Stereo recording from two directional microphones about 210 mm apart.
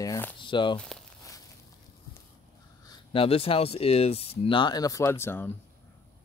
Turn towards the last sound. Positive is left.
turn(degrees=10)  # may be behind; listen again after turning